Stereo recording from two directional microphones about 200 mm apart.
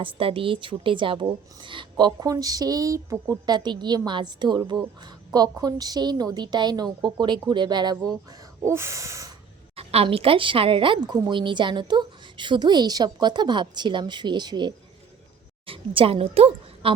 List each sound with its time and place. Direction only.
0.0 s speech: 25° right (ahead or behind)
8.6 s snort: 15° right (ahead or behind)
9.7 s a woman's voice: 30° right (ahead or behind)